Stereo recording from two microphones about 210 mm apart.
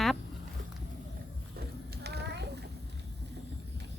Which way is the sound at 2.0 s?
50° right (ahead or behind).